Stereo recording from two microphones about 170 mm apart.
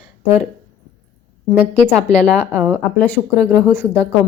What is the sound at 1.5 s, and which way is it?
Speech, 10° right (ahead or behind).